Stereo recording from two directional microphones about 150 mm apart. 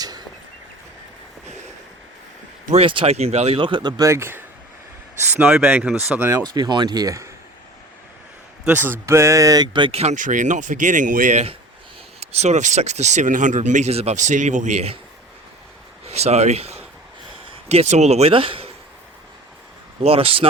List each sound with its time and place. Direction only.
2.8 s speech: 35° right (ahead or behind); by 6.4 s 15° right (ahead or behind)
6.5 s speech: 25° right (ahead or behind)
8.6 s speech: 15° right (ahead or behind); by 14.9 s 50° right (ahead or behind)
16.0 s speech: 45° right (ahead or behind)
20.0 s speech: 40° right (ahead or behind)